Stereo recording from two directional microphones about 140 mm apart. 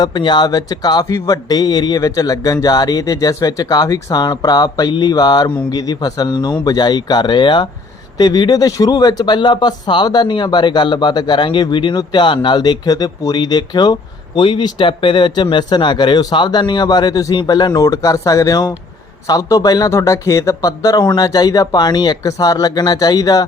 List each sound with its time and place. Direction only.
0.0 s a man's voice: 30° left (ahead or behind)